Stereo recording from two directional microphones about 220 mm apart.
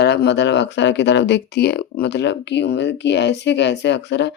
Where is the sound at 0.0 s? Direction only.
50° left (ahead or behind).